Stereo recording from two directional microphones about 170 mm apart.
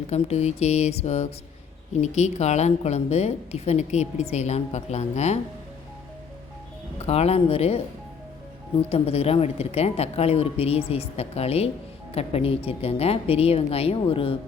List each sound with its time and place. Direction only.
0.1 s a woman's voice: 40° left (ahead or behind)
7.0 s a woman's voice: 40° left (ahead or behind)
8.9 s a woman's voice: 35° left (ahead or behind)